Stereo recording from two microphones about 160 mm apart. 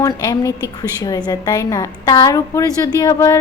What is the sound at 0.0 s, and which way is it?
A woman's voice, 20° left (ahead or behind).